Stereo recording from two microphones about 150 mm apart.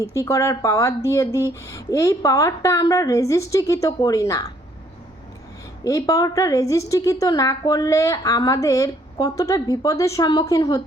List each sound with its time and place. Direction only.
0.0 s a woman's voice: 20° left (ahead or behind)
5.8 s a woman's voice: 20° left (ahead or behind)